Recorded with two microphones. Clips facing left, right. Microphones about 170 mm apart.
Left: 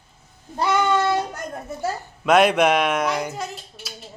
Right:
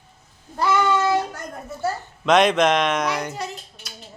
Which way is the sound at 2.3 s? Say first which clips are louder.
Left 1 dB; 5° left (ahead or behind).